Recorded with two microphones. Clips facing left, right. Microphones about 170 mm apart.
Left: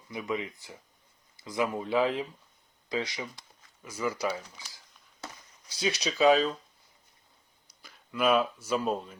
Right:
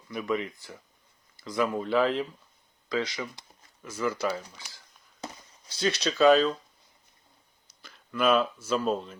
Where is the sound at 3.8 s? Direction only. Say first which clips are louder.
Right 2 dB; centre (ahead or behind).